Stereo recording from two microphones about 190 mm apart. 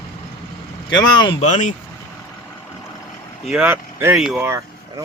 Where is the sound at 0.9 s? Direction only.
25° left (ahead or behind).